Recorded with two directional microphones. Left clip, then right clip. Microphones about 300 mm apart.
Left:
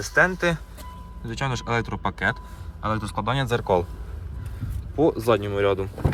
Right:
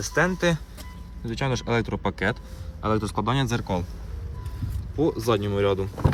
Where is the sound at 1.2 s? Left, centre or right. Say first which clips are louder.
Right 1 dB; centre.